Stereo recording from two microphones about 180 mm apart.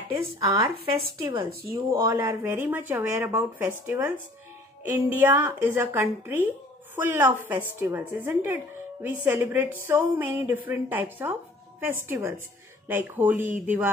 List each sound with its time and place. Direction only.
0.4 s speech: 25° right (ahead or behind)
1.7 s speech: 15° right (ahead or behind)